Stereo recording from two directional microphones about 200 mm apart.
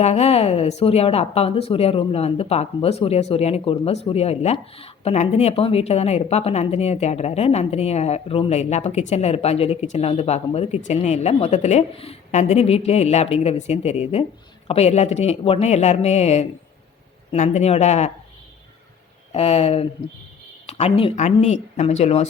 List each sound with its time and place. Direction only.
0.0 s a woman's voice: 30° left (ahead or behind)
19.3 s a woman's voice: 30° left (ahead or behind)